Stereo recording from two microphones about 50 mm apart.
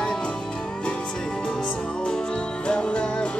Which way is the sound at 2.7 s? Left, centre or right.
Centre.